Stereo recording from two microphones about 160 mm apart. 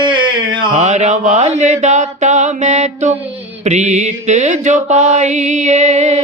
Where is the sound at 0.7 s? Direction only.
45° right (ahead or behind).